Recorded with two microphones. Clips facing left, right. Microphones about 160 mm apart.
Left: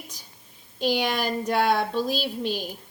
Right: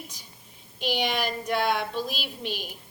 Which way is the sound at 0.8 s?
45° left (ahead or behind).